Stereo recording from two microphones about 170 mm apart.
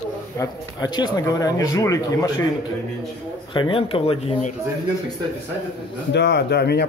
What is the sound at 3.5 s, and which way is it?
Speech, 30° left (ahead or behind).